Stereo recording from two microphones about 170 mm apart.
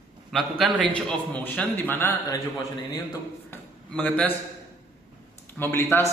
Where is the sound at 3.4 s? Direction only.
5° left (ahead or behind).